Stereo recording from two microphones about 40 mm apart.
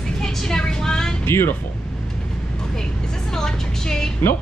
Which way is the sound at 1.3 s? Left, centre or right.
Left.